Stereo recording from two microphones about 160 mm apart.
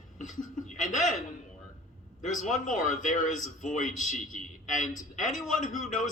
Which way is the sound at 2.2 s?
50° left (ahead or behind).